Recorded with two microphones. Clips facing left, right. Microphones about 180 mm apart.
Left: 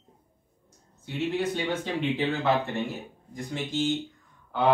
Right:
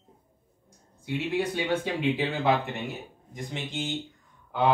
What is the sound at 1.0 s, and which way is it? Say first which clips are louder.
A man's voice: even; 10° right (ahead or behind).